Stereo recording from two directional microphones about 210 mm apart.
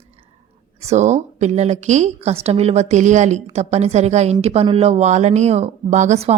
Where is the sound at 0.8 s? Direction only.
30° right (ahead or behind).